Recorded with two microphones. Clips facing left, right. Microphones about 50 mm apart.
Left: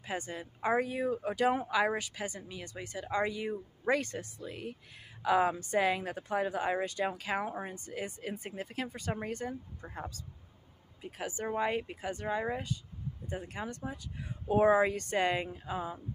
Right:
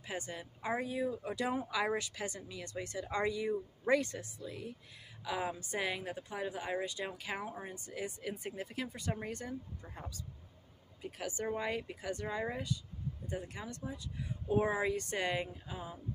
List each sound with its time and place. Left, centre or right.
0.0 s speech: left
0.8 s a woman's voice: left
1.6 s speech: left
1.9 s speech: left
3.3 s speech: left
4.0 s a woman's voice: left